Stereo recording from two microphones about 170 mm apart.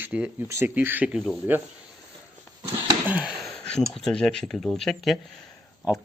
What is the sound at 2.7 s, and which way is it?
Speech, 10° right (ahead or behind).